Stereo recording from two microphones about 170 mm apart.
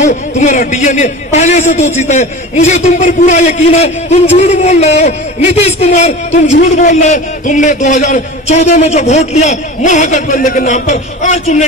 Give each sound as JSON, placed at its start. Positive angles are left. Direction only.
{"t": 0.0, "sound": "a man's voice", "side_deg": 45}